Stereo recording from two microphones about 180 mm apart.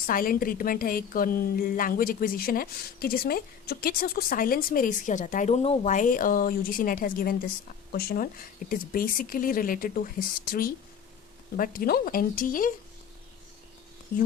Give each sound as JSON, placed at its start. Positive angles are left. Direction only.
{"t": 0.1, "sound": "a woman's voice", "side_deg": 55}